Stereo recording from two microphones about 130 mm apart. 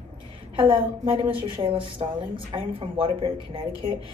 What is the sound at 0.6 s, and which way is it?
A woman's voice, 40° right (ahead or behind).